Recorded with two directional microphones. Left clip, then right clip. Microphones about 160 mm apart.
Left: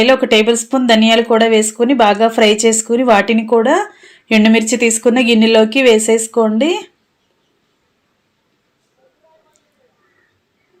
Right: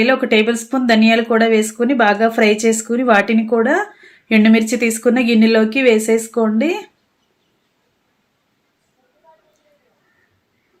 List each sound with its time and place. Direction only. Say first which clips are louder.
0.0 s speech: left 4 dB; 15° left (ahead or behind)